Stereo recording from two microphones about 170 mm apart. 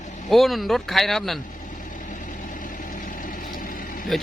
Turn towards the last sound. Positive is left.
turn(degrees=0)  # may be behind; listen again after turning